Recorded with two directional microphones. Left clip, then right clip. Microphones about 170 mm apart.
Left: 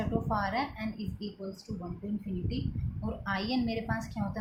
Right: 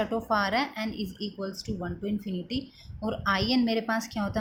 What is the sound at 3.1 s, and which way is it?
A woman's voice, 50° right (ahead or behind).